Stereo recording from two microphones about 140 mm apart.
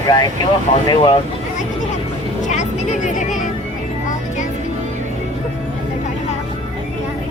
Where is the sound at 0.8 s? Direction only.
35° left (ahead or behind).